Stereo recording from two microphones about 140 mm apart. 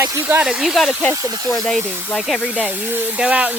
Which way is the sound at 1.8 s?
15° right (ahead or behind).